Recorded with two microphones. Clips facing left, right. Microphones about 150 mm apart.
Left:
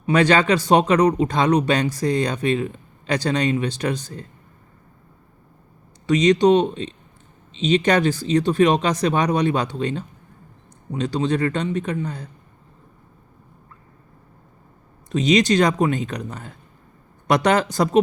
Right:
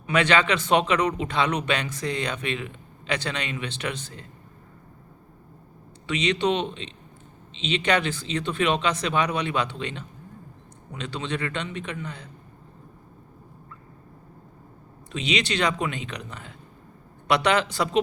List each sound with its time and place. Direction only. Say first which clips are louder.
0.0 s speech: left 5 dB; 35° left (ahead or behind)
6.1 s speech: left 9 dB; 40° left (ahead or behind)
15.1 s speech: left 10 dB; 40° left (ahead or behind)